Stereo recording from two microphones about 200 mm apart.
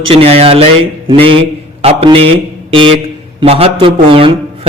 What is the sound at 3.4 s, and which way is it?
Speech, 30° right (ahead or behind).